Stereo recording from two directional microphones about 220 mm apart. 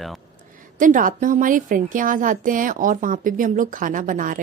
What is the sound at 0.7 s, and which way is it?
A woman's voice, 35° right (ahead or behind).